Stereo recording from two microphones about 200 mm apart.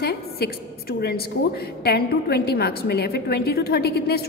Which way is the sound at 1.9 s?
55° left (ahead or behind).